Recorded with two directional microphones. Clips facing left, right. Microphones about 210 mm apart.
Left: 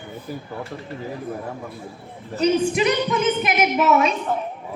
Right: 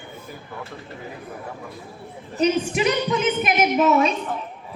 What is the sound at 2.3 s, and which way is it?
A woman's voice, 20° right (ahead or behind).